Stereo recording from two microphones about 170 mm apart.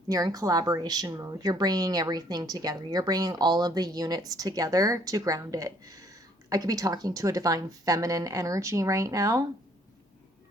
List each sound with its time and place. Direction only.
0.1 s speech: 20° right (ahead or behind)